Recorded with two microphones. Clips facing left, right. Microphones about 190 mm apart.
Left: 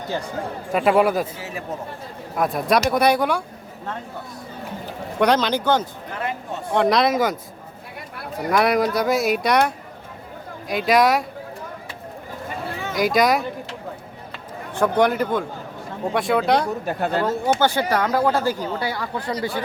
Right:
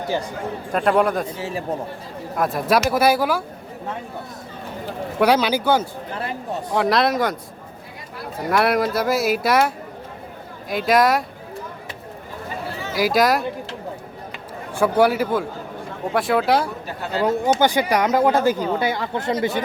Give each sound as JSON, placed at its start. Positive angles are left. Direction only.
{"t": 0.7, "sound": "speech", "side_deg": 5}
{"t": 1.4, "sound": "speech", "side_deg": -30}
{"t": 2.3, "sound": "speech", "side_deg": 0}
{"t": 5.2, "sound": "speech", "side_deg": -10}
{"t": 8.4, "sound": "speech", "side_deg": 0}
{"t": 12.9, "sound": "speech", "side_deg": -5}
{"t": 14.8, "sound": "speech", "side_deg": -5}
{"t": 16.8, "sound": "speech", "side_deg": 50}
{"t": 17.6, "sound": "speech", "side_deg": -15}